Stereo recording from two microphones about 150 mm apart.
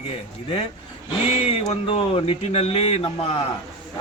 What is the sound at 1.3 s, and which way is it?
A man's voice, 40° left (ahead or behind).